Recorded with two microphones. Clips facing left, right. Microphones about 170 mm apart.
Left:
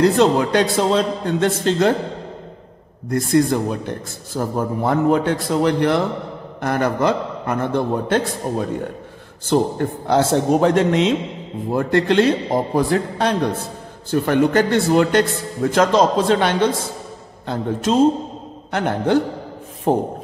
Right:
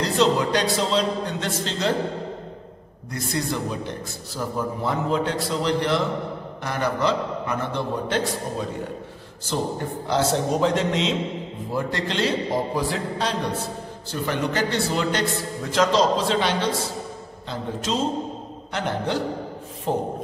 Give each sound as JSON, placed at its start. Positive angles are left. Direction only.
{"t": 0.0, "sound": "speech", "side_deg": 55}
{"t": 3.1, "sound": "a man's voice", "side_deg": 50}
{"t": 18.7, "sound": "a man's voice", "side_deg": 55}